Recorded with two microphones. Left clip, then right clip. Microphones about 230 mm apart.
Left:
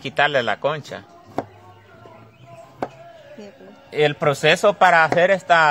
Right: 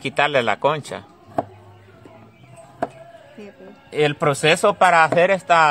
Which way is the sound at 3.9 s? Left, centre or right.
Centre.